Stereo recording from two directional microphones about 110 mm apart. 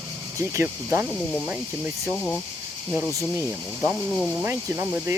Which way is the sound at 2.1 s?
5° left (ahead or behind).